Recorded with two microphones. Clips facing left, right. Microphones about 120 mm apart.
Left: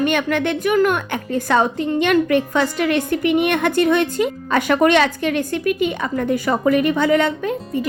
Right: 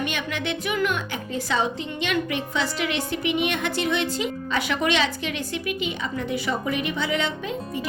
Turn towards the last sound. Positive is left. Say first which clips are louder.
# left 7 dB
turn(degrees=50)  # may be behind; listen again after turning